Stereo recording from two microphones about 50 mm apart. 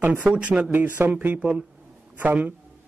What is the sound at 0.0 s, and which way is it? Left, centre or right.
Speech, right.